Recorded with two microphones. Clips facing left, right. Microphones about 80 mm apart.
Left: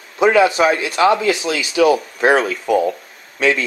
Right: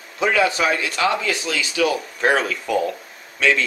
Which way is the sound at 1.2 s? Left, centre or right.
Left.